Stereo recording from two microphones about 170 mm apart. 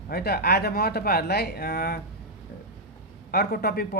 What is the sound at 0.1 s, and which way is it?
Speech, 65° left (ahead or behind).